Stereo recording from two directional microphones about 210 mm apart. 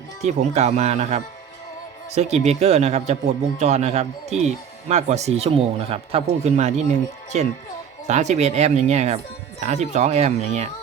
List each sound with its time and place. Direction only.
0.2 s a man's voice: 30° right (ahead or behind)